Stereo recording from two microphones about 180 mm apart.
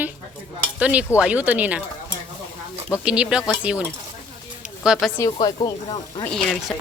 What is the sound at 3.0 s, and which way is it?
Speech, 5° right (ahead or behind).